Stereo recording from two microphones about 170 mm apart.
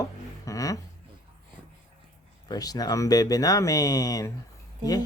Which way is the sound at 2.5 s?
20° left (ahead or behind).